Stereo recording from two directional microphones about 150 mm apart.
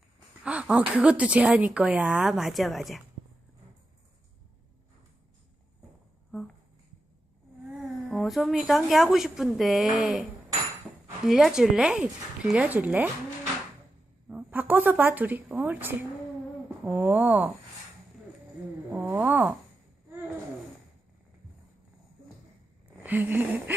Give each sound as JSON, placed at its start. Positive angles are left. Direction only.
{"t": 0.4, "sound": "a woman's voice", "side_deg": -5}
{"t": 8.1, "sound": "a woman's voice", "side_deg": 0}
{"t": 11.3, "sound": "a woman's voice", "side_deg": 0}
{"t": 14.3, "sound": "a woman's voice", "side_deg": -10}
{"t": 18.9, "sound": "a woman's voice", "side_deg": -10}
{"t": 23.0, "sound": "a woman's voice", "side_deg": -10}